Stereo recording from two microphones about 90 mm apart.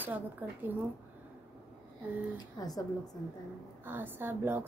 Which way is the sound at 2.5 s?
45° left (ahead or behind).